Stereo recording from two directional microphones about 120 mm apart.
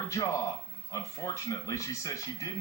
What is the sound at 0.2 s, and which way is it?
Speech, 30° left (ahead or behind).